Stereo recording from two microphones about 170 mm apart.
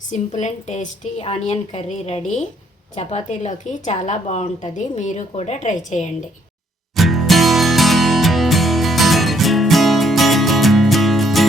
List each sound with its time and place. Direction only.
0.1 s a woman's voice: 45° left (ahead or behind)
6.9 s music: centre (ahead or behind)